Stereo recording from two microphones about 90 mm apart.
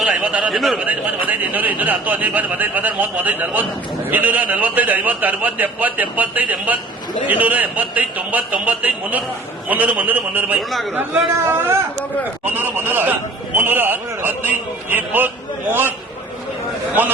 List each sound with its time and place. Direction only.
0.0 s a man's voice: 15° right (ahead or behind)
0.5 s a man's voice: centre (ahead or behind)
0.8 s a man's voice: 20° right (ahead or behind)
17.0 s a man's voice: 20° right (ahead or behind)